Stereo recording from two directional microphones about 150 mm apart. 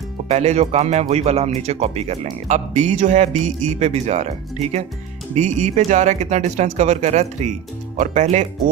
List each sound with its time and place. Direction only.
0.3 s speech: 45° right (ahead or behind)